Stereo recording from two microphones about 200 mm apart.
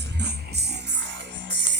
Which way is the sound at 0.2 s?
55° right (ahead or behind).